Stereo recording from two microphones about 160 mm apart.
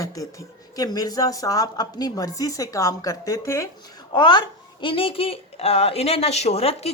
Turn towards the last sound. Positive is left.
turn(degrees=40)  # may be behind; listen again after turning